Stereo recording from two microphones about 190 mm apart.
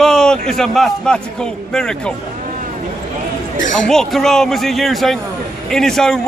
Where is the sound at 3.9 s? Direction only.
Centre (ahead or behind).